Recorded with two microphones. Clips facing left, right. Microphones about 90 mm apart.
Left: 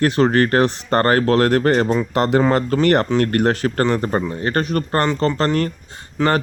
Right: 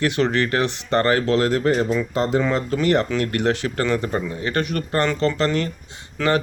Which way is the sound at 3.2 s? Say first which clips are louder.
Left 4 dB; 45° left (ahead or behind).